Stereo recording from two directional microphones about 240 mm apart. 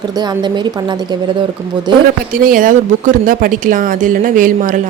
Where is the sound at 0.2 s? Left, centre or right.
Centre.